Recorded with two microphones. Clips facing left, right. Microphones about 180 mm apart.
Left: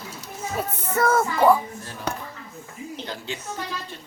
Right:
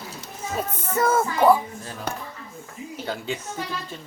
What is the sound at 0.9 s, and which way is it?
Speech, 15° right (ahead or behind).